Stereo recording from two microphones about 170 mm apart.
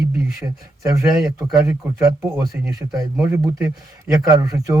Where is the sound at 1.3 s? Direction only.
15° right (ahead or behind).